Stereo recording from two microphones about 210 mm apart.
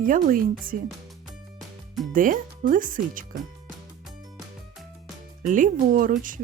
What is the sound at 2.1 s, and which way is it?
Speech, 40° right (ahead or behind).